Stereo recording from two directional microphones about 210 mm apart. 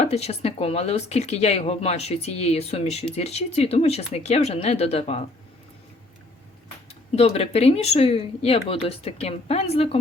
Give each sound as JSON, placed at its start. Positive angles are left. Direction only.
{"t": 0.0, "sound": "speech", "side_deg": 30}
{"t": 7.2, "sound": "speech", "side_deg": 30}